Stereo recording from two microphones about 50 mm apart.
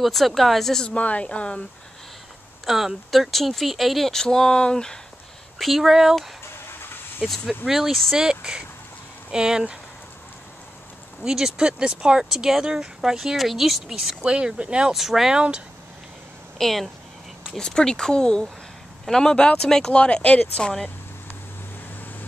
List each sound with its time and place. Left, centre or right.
0.0 s speech: centre
0.8 s a woman's voice: left
2.6 s speech: centre
5.6 s speech: centre
7.2 s speech: centre
7.6 s speech: centre
11.2 s speech: centre
14.2 s speech: centre
14.9 s speech: centre
15.3 s speech: centre
16.5 s speech: centre
17.6 s a woman's voice: centre